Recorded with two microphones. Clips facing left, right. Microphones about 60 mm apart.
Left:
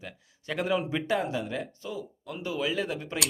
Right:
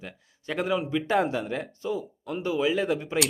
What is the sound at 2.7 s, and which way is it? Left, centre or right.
Speech, right.